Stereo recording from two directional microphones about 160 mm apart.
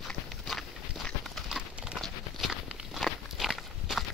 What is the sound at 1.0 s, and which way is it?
Clip-clop, centre (ahead or behind).